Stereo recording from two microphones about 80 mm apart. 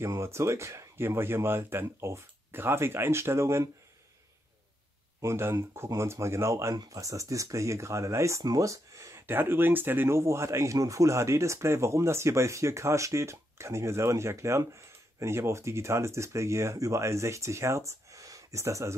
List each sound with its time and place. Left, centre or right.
0.0 s speech: right
5.2 s speech: right